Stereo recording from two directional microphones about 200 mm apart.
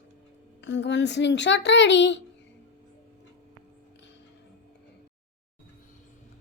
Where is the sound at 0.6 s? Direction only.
65° left (ahead or behind).